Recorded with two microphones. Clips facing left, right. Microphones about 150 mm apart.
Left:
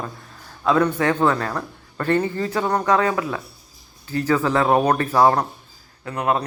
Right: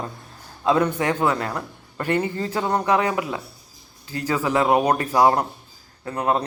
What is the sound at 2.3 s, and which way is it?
A man's voice, 25° right (ahead or behind).